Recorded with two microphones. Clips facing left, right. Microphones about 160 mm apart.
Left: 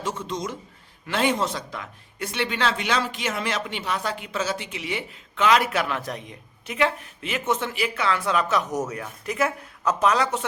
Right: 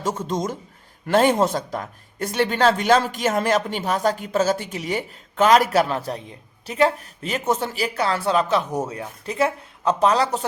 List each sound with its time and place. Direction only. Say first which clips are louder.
0.0 s speech: right 5 dB; 45° right (ahead or behind)